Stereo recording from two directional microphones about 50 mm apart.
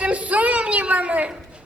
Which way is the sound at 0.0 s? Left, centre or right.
Right.